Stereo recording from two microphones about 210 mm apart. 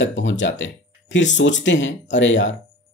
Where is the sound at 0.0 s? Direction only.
65° left (ahead or behind).